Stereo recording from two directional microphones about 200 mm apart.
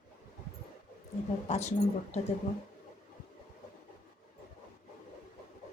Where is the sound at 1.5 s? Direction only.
35° left (ahead or behind).